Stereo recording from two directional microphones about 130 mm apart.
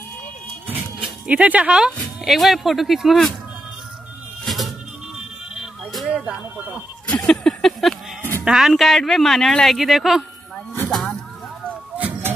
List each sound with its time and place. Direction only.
0.7 s music: 10° right (ahead or behind)
2.0 s speech: centre (ahead or behind)
4.5 s a sound: centre (ahead or behind)
5.9 s music: centre (ahead or behind)
6.2 s speech: 10° right (ahead or behind)
7.1 s a sound: 5° left (ahead or behind)
8.2 s music: 15° left (ahead or behind)
8.5 s speech: 5° right (ahead or behind)
10.9 s music: centre (ahead or behind)
12.0 s music: 10° right (ahead or behind)